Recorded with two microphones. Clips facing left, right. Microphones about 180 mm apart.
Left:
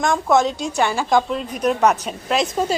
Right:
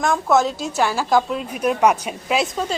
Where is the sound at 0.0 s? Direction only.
Centre (ahead or behind).